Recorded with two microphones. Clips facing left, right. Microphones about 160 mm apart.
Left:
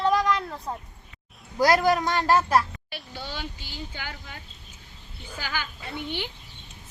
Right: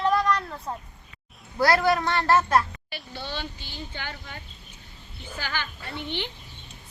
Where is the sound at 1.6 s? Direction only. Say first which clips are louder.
Left 1 dB; 15° left (ahead or behind).